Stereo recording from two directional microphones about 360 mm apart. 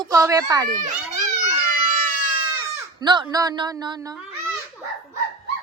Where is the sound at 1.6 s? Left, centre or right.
Right.